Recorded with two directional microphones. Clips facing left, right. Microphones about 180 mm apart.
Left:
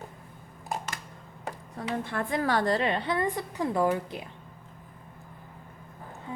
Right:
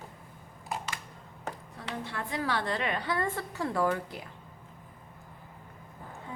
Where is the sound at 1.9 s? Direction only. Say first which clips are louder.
Left 6 dB; 50° left (ahead or behind); by 4.3 s 20° left (ahead or behind).